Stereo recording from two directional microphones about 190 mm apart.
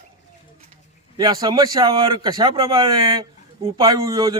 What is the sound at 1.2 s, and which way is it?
A man's voice, 20° right (ahead or behind).